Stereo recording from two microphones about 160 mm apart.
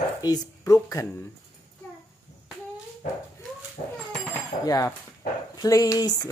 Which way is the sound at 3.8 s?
45° left (ahead or behind).